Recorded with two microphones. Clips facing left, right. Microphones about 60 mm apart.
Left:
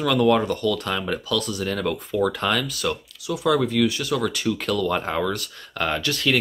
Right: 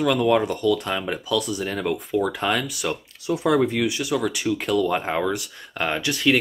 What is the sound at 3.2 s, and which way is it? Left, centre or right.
Speech, right.